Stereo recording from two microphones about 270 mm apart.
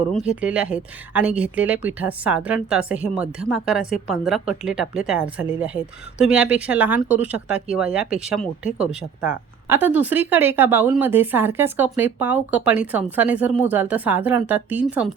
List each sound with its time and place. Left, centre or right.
0.3 s a woman's voice: centre